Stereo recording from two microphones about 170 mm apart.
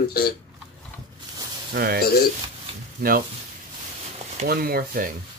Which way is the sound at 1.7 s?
65° right (ahead or behind).